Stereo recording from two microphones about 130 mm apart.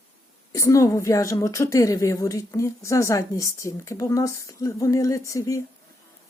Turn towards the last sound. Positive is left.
turn(degrees=25)  # may be behind; listen again after turning